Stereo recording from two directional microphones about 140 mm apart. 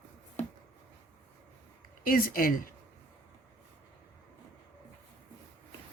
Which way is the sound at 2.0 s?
90° left.